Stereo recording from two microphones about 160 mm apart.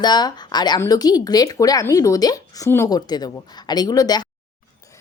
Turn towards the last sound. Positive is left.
turn(degrees=25)  # may be behind; listen again after turning